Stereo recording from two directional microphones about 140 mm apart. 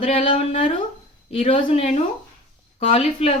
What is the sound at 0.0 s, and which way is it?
A woman's voice, 45° left (ahead or behind).